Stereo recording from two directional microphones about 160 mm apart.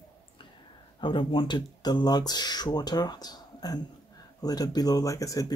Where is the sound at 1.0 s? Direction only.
30° left (ahead or behind).